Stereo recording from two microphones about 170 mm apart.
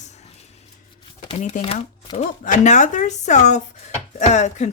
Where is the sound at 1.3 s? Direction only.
40° left (ahead or behind).